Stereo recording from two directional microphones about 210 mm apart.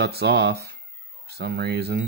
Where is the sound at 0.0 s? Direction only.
50° right (ahead or behind).